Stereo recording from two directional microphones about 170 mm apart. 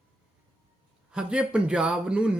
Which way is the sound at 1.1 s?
5° right (ahead or behind).